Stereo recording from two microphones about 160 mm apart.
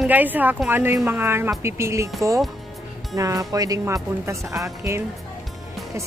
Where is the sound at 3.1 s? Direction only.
20° right (ahead or behind).